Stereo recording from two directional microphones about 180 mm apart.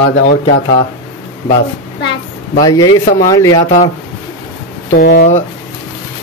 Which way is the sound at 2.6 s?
20° left (ahead or behind).